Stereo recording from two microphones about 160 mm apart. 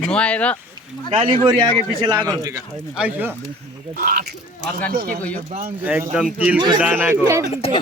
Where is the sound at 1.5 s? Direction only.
25° right (ahead or behind).